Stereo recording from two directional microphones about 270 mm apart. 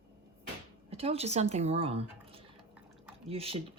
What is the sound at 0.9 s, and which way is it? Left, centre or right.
Speech, right.